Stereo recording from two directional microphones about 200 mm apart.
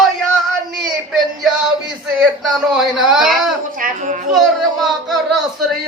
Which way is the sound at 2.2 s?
5° right (ahead or behind).